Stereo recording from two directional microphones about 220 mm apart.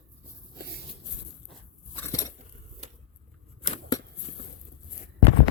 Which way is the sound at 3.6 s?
25° left (ahead or behind).